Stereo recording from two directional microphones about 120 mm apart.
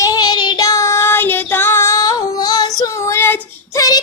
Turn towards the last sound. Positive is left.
turn(degrees=20)  # may be behind; listen again after turning